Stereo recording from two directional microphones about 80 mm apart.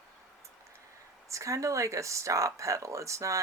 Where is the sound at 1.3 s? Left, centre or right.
Right.